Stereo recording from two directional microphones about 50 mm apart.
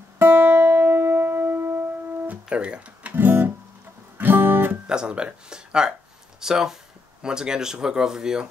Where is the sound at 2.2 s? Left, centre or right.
Right.